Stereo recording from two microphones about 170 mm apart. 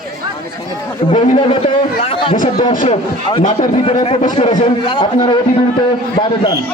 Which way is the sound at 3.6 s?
35° left (ahead or behind).